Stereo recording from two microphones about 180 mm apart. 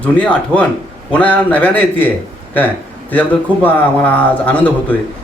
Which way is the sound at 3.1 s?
10° left (ahead or behind).